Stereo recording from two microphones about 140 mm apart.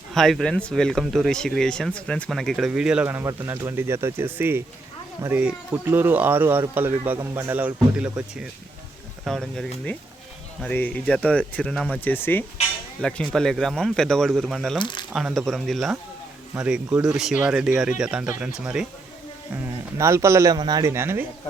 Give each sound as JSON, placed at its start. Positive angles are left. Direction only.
{"t": 0.1, "sound": "speech", "side_deg": 0}
{"t": 14.8, "sound": "speech", "side_deg": 35}
{"t": 15.1, "sound": "speech", "side_deg": -5}
{"t": 19.6, "sound": "speech", "side_deg": -20}